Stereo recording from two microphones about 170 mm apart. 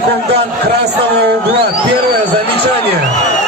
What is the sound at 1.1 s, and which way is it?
Speech, 70° right (ahead or behind).